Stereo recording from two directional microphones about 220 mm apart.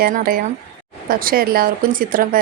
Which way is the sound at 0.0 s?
40° right (ahead or behind).